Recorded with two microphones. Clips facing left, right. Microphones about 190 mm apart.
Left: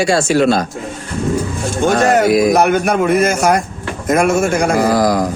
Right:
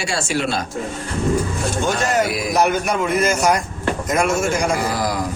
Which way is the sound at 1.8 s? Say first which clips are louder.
Left 8 dB; 55° left (ahead or behind).